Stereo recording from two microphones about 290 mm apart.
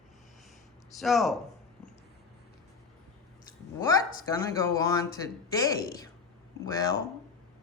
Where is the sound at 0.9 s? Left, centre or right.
Centre.